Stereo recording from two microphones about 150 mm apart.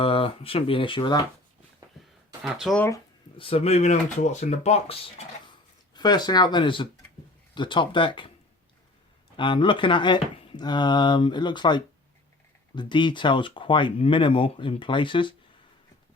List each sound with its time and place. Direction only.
0.0 s speech: 40° left (ahead or behind)
2.4 s speech: centre (ahead or behind)
2.7 s speech: 15° left (ahead or behind)
3.3 s speech: 40° left (ahead or behind)
5.9 s speech: 30° left (ahead or behind)
9.4 s speech: 35° left (ahead or behind)